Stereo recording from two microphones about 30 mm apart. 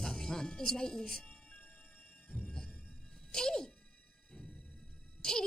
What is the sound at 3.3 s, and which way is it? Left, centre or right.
Speech, left.